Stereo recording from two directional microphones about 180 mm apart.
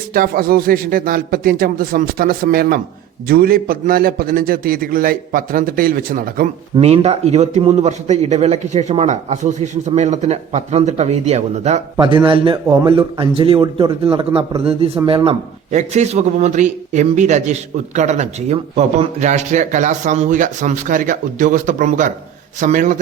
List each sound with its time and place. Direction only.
0.1 s a man's voice: 55° right (ahead or behind)
6.7 s a man's voice: 35° right (ahead or behind)
11.9 s a man's voice: 25° right (ahead or behind); by 23.0 s 45° right (ahead or behind)